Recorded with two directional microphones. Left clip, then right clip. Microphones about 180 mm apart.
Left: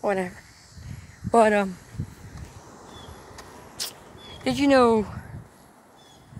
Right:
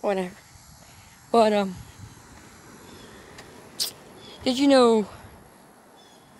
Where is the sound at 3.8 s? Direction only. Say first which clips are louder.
Right 4 dB; 10° right (ahead or behind).